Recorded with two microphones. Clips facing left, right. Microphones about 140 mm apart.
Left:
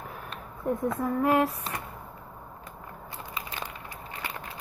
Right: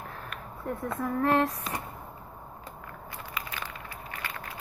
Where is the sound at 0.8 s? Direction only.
10° left (ahead or behind).